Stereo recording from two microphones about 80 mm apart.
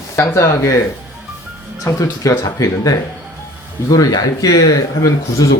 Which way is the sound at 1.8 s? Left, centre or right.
Left.